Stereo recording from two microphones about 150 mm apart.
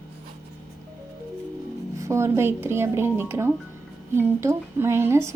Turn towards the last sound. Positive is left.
turn(degrees=-15)  # may be behind; listen again after turning